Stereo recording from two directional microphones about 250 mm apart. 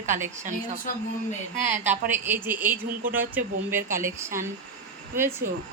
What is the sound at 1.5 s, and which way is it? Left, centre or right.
Speech, right.